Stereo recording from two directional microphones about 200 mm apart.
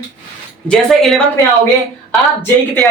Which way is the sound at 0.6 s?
Centre (ahead or behind).